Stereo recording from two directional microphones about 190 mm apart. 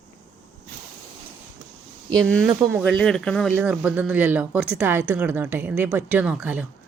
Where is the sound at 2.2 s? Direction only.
5° left (ahead or behind).